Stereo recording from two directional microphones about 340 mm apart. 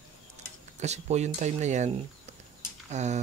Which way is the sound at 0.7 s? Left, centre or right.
Centre.